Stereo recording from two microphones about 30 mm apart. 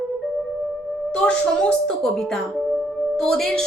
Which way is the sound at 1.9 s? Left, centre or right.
Centre.